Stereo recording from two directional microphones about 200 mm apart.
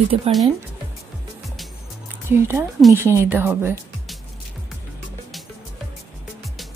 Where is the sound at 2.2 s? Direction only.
10° right (ahead or behind).